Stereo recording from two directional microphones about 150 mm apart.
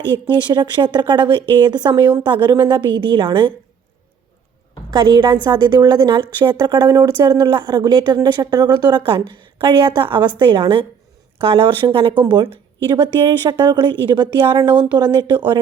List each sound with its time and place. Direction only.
0.4 s a woman's voice: 30° right (ahead or behind)
4.9 s a woman's voice: 25° right (ahead or behind)